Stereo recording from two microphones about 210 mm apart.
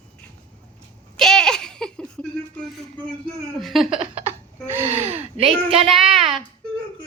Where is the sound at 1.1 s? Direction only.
Centre (ahead or behind).